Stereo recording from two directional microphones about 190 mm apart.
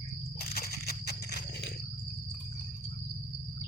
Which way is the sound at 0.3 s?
55° left (ahead or behind).